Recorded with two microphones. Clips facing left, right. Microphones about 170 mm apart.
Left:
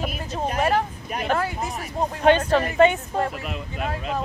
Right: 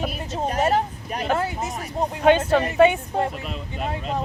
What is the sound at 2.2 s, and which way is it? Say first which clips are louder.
Speech: right 1 dB; 10° right (ahead or behind).